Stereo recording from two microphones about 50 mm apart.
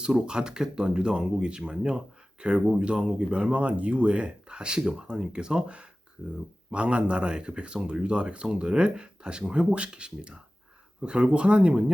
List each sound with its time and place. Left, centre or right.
0.0 s speech: centre